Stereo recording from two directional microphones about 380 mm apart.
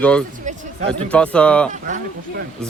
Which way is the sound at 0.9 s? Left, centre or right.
Centre.